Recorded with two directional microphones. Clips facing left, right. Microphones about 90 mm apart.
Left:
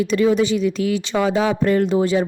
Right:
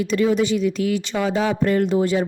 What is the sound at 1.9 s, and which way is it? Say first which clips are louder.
Speech: left 1 dB; 90° left.